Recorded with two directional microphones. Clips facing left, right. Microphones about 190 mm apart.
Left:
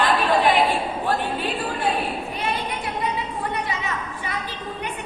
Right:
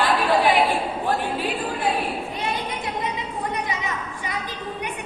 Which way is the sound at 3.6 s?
15° right (ahead or behind).